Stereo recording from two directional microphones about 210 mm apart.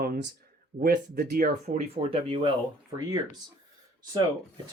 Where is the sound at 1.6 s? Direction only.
30° right (ahead or behind).